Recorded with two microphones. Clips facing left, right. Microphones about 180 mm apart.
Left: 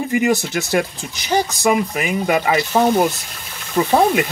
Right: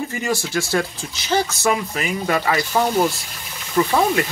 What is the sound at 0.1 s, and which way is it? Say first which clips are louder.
Speech: left 5 dB; 20° left (ahead or behind).